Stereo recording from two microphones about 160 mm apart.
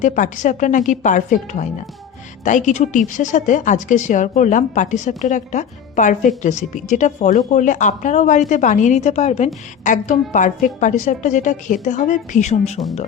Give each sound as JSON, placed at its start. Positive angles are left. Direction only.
{"t": 0.0, "sound": "speech", "side_deg": 50}
{"t": 9.8, "sound": "speech", "side_deg": 50}